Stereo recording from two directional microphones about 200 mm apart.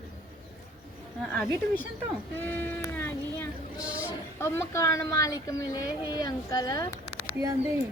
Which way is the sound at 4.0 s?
15° left (ahead or behind).